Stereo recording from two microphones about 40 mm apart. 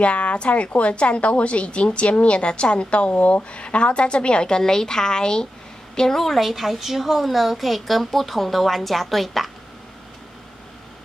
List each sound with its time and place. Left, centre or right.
0.0 s a woman's voice: left; by 9.5 s centre